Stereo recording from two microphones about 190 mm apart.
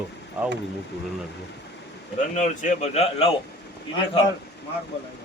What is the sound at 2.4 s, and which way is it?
Speech, 40° left (ahead or behind).